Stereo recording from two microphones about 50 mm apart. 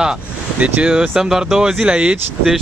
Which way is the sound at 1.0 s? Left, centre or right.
Centre.